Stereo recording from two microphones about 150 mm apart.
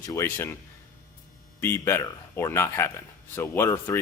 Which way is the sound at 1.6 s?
15° left (ahead or behind).